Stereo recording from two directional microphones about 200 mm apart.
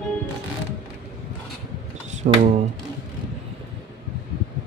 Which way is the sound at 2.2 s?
35° right (ahead or behind).